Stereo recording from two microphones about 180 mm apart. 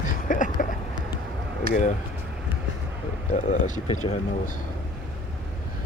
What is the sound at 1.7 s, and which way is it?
Speech, 40° left (ahead or behind).